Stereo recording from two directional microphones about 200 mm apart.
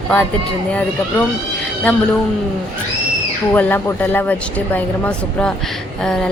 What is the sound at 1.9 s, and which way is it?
Speech, 5° left (ahead or behind).